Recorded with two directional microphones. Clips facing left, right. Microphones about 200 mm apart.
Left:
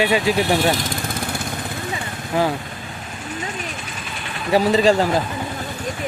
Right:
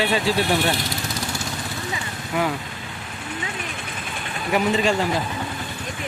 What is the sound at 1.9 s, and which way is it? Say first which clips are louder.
Vehicle: left 3 dB; 30° left (ahead or behind).